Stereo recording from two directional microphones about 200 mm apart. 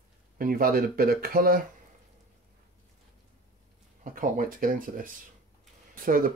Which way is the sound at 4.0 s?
45° right (ahead or behind).